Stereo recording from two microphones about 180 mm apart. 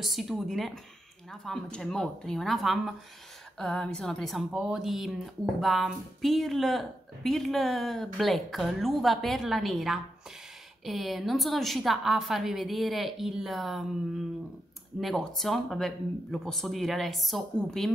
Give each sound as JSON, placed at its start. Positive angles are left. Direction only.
{"t": 0.0, "sound": "a woman's voice", "side_deg": 0}
{"t": 15.0, "sound": "a woman's voice", "side_deg": 0}